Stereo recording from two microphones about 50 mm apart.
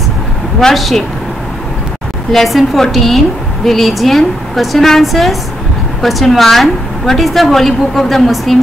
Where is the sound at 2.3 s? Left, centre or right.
Centre.